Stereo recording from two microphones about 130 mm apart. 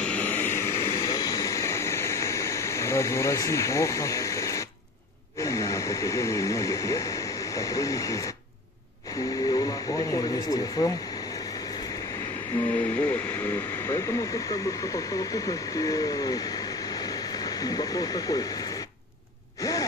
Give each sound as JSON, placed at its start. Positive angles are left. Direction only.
{"t": 0.0, "sound": "vehicle", "side_deg": 10}
{"t": 5.4, "sound": "a sound", "side_deg": 25}
{"t": 9.5, "sound": "speech", "side_deg": 25}
{"t": 12.6, "sound": "speech", "side_deg": 10}
{"t": 19.6, "sound": "gasp", "side_deg": 25}